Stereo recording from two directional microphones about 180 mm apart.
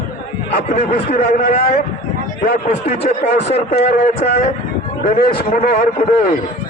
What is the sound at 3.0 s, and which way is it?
A man's voice, 35° left (ahead or behind).